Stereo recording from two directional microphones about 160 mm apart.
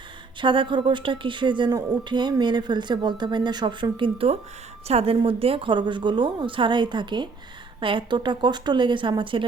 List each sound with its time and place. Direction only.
0.4 s a woman's voice: 30° right (ahead or behind)